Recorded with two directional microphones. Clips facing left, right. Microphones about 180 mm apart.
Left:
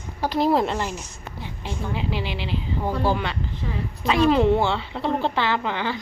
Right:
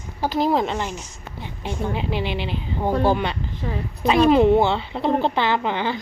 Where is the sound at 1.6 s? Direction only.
20° right (ahead or behind).